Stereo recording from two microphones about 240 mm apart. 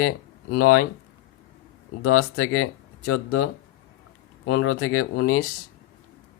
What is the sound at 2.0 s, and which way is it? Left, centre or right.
Speech, left.